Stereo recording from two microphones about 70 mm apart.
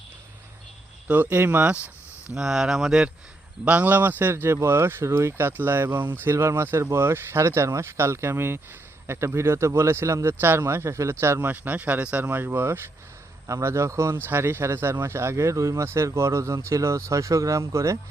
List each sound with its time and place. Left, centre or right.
1.1 s speech: right
2.3 s speech: centre
3.6 s speech: centre
6.3 s speech: right